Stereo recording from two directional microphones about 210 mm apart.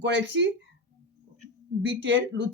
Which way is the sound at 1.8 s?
55° right (ahead or behind).